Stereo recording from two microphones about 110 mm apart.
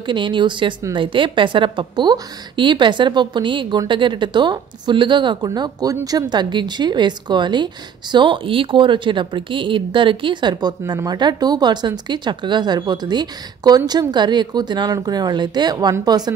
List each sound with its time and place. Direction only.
0.0 s a woman's voice: 45° right (ahead or behind)